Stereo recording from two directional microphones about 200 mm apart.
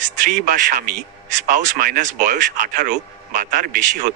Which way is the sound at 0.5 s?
45° right (ahead or behind).